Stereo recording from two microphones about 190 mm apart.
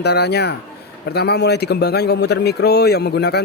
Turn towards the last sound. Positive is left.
turn(degrees=60)  # may be behind; listen again after turning